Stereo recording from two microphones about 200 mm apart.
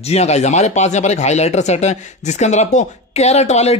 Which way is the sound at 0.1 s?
35° left (ahead or behind).